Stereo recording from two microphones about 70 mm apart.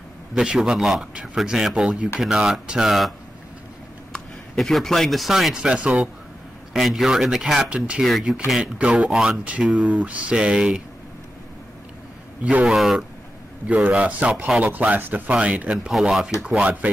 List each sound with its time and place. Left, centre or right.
0.3 s speech: centre
4.1 s speech: centre
6.7 s speech: centre
8.0 s speech: centre
9.4 s speech: centre
12.6 s speech: centre
13.8 s speech: centre
15.9 s speech: centre
16.4 s speech: centre